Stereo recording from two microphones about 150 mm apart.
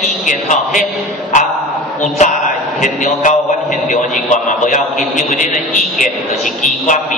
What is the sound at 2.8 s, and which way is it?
A man's voice, 55° left (ahead or behind).